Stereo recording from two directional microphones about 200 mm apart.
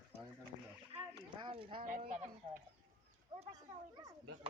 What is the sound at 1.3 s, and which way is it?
Speech, 25° right (ahead or behind).